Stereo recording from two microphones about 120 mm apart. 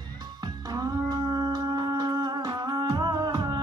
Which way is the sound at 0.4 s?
35° right (ahead or behind).